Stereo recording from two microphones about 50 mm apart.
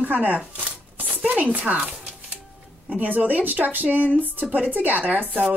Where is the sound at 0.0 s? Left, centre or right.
Right.